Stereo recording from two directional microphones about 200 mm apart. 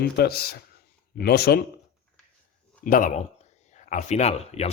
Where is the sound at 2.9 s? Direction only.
45° left (ahead or behind).